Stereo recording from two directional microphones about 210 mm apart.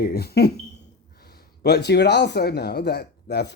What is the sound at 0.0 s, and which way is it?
Speech, 50° left (ahead or behind).